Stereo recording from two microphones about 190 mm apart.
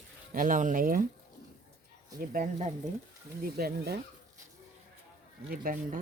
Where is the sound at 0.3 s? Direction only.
45° right (ahead or behind).